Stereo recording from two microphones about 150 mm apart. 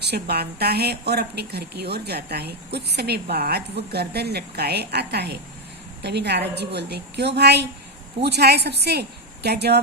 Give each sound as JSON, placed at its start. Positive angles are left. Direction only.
{"t": 0.0, "sound": "speech", "side_deg": -90}